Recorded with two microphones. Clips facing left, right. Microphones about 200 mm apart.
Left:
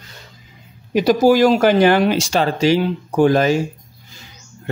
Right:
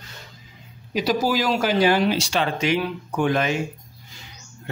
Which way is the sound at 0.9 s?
50° left (ahead or behind).